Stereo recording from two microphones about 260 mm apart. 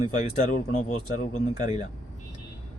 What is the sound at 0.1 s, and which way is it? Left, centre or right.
Speech, left.